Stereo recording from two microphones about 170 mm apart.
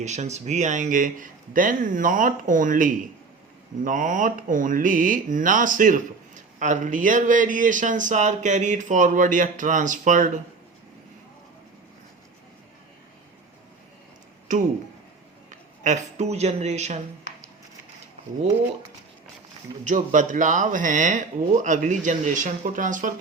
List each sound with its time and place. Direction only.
0.0 s speech: 45° right (ahead or behind)
15.4 s speech: 45° right (ahead or behind)
19.8 s speech: 45° right (ahead or behind)